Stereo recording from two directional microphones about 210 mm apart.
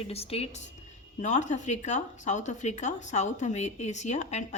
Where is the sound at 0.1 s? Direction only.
30° left (ahead or behind).